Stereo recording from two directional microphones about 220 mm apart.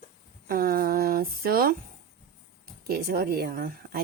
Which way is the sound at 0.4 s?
40° right (ahead or behind).